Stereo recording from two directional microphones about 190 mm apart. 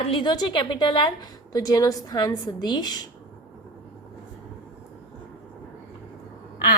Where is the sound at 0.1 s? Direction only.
25° left (ahead or behind).